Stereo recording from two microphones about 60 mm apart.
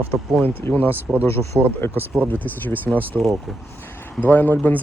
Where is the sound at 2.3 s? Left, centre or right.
Left.